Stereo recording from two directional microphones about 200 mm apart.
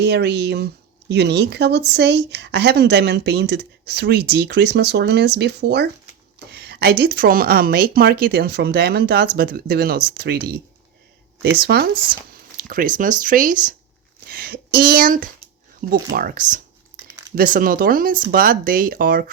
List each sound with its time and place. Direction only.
0.0 s speech: 55° right (ahead or behind)